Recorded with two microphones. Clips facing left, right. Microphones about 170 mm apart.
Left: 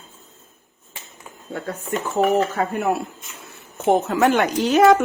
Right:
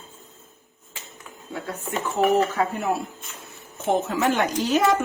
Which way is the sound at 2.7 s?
60° left (ahead or behind).